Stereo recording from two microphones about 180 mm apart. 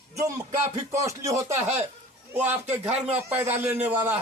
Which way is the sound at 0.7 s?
15° right (ahead or behind).